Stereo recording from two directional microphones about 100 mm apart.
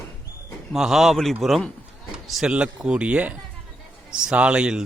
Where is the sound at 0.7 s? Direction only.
Centre (ahead or behind).